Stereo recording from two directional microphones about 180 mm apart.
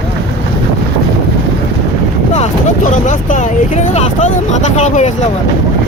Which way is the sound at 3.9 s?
40° left (ahead or behind).